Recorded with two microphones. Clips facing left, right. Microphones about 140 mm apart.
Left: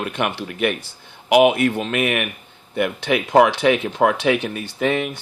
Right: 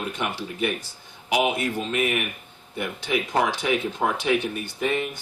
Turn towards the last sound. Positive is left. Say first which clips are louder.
# left 5 dB
turn(degrees=90)